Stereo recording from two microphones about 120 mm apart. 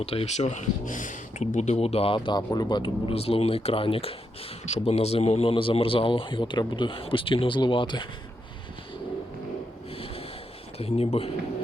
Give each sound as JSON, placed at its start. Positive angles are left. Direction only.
{"t": 0.0, "sound": "speech", "side_deg": 55}
{"t": 4.6, "sound": "speech", "side_deg": 65}
{"t": 10.8, "sound": "speech", "side_deg": 55}